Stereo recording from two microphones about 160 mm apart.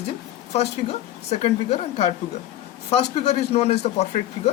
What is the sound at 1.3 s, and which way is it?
Speech, 45° left (ahead or behind).